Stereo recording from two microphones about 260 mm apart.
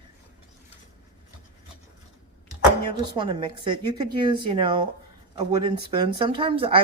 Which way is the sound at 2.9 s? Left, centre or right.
Centre.